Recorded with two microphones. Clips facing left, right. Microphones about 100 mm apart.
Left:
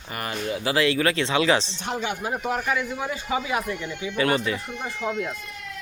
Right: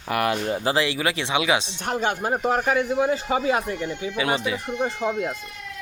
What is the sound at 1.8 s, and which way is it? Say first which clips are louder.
A man's voice: right 4 dB; 45° right (ahead or behind).